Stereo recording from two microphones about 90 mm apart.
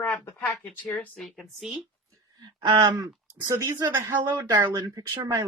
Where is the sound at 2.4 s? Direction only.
55° right (ahead or behind); by 4.5 s 35° right (ahead or behind).